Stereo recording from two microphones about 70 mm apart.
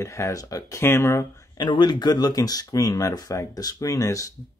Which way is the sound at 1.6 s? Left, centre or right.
Left.